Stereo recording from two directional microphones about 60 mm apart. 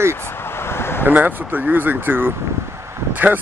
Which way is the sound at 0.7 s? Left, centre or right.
Left.